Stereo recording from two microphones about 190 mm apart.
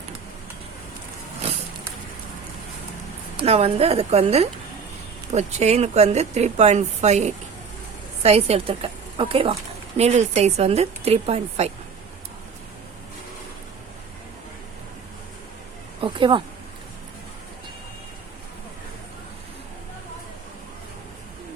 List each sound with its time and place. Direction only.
3.3 s speech: 30° right (ahead or behind)
16.0 s speech: 25° right (ahead or behind)